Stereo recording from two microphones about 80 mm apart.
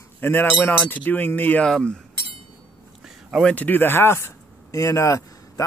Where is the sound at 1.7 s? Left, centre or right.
Centre.